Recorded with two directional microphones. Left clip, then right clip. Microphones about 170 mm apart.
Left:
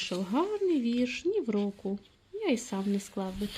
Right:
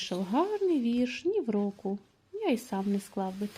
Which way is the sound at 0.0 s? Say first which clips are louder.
Right 1 dB; 10° right (ahead or behind).